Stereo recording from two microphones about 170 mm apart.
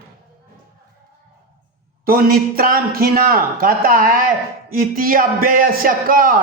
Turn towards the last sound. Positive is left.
turn(degrees=-55)  # may be behind; listen again after turning